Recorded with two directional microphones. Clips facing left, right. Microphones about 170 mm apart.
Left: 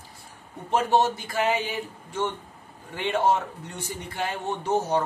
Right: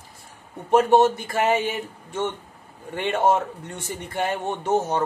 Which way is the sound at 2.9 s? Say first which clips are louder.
Right 3 dB; 60° right (ahead or behind).